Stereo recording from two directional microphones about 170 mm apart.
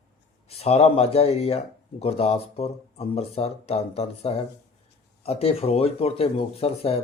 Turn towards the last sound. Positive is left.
turn(degrees=35)  # may be behind; listen again after turning